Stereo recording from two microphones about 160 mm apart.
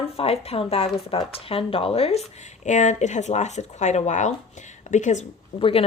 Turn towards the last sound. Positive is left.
turn(degrees=35)  # may be behind; listen again after turning